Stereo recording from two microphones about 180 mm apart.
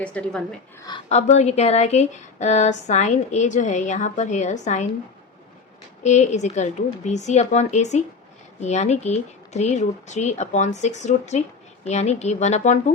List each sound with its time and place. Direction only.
0.0 s speech: 5° left (ahead or behind)
1.1 s speech: 40° left (ahead or behind)
6.0 s speech: 40° left (ahead or behind)